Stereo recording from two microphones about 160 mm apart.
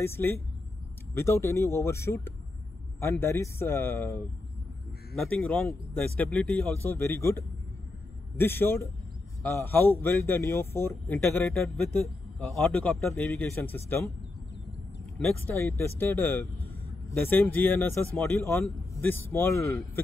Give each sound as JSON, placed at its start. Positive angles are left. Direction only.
{"t": 0.0, "sound": "speech", "side_deg": 15}
{"t": 11.6, "sound": "a man's voice", "side_deg": 5}
{"t": 15.1, "sound": "speech", "side_deg": 10}